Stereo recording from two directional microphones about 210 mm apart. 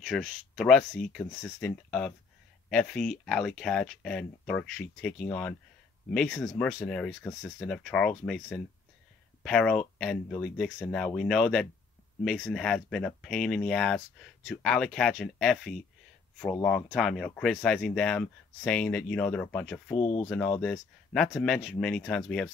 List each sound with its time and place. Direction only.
0.0 s speech: centre (ahead or behind)
20.0 s speech: 25° left (ahead or behind)
20.2 s speech: 5° left (ahead or behind)